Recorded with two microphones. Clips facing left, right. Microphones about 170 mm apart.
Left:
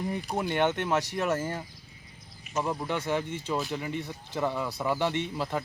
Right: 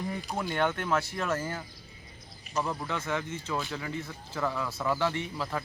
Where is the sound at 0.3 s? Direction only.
20° left (ahead or behind).